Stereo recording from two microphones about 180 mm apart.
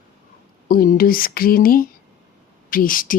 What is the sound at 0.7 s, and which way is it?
Speech, 50° left (ahead or behind).